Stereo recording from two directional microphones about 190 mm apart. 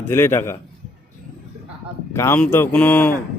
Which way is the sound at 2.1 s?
15° left (ahead or behind).